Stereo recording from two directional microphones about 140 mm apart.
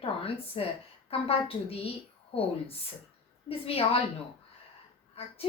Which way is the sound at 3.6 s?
45° left (ahead or behind).